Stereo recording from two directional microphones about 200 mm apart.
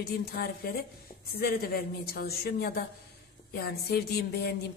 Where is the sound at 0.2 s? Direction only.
50° left (ahead or behind).